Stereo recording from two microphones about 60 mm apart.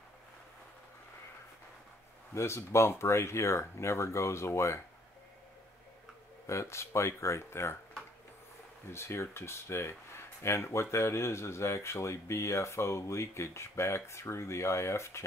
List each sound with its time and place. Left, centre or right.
2.3 s speech: left
6.4 s speech: left
8.9 s speech: left